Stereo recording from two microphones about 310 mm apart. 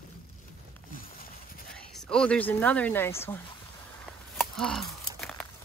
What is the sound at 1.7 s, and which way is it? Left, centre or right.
Speech, centre.